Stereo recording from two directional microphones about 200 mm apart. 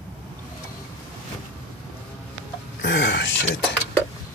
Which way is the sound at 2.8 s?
60° left (ahead or behind).